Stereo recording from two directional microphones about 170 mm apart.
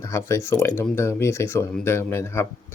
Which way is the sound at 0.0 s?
15° left (ahead or behind).